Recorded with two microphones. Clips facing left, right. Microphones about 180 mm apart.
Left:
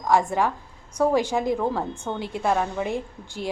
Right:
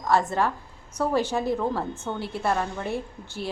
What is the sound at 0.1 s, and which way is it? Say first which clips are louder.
A woman's voice: left 2 dB; 15° left (ahead or behind).